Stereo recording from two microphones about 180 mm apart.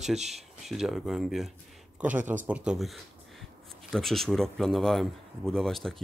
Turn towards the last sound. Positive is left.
turn(degrees=0)  # may be behind; listen again after turning